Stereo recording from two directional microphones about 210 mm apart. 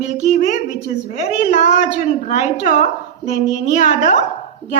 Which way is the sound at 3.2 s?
35° right (ahead or behind).